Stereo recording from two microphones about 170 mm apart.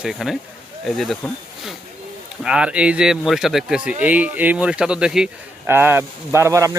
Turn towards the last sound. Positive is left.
turn(degrees=-15)  # may be behind; listen again after turning